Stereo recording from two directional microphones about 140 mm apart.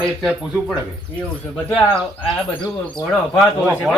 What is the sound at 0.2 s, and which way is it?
Speech, centre (ahead or behind).